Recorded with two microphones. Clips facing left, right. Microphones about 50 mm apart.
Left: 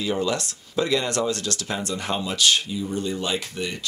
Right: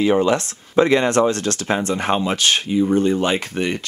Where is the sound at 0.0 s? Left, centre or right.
Right.